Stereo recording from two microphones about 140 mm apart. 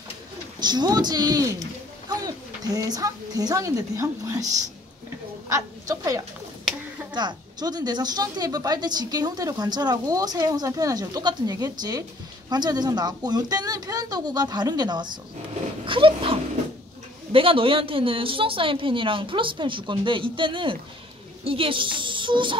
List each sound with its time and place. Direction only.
0.6 s a woman's voice: 30° right (ahead or behind)
5.5 s a woman's voice: 20° right (ahead or behind)